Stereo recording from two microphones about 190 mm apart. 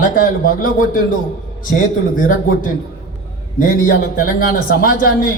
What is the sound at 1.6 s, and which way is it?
A man's voice, 45° left (ahead or behind).